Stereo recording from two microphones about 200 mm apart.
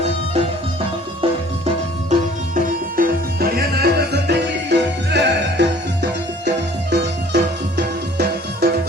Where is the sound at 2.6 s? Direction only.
45° right (ahead or behind).